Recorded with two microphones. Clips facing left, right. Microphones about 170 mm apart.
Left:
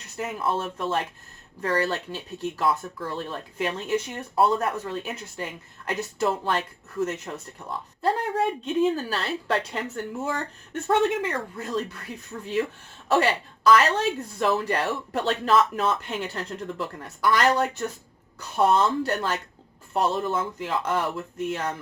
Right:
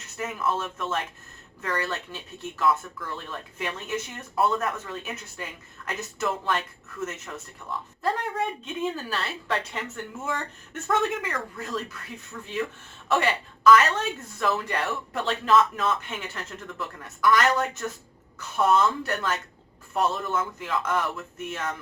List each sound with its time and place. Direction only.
0.2 s speech: 30° left (ahead or behind)
10.8 s speech: 30° left (ahead or behind)
13.7 s speech: 35° left (ahead or behind)